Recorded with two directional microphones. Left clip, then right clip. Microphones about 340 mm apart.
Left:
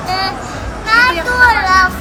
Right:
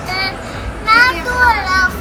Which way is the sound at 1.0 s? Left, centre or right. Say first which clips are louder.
Left 2 dB; left.